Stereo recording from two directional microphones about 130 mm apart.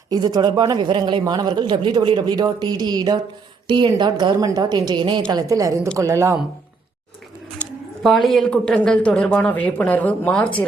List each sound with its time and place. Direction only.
0.1 s a man's voice: 30° right (ahead or behind)
7.6 s speech: centre (ahead or behind)